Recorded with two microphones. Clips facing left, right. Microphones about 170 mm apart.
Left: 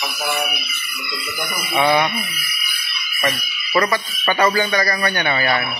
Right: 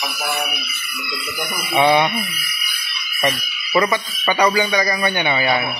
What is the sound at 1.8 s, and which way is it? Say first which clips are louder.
Speech: right 2 dB; 20° right (ahead or behind).